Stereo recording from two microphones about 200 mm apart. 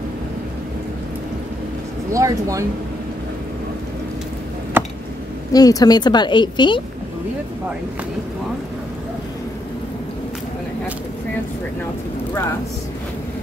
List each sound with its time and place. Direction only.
2.1 s speech: 15° right (ahead or behind)
4.7 s a sound: 10° right (ahead or behind)
5.5 s a woman's voice: 20° left (ahead or behind)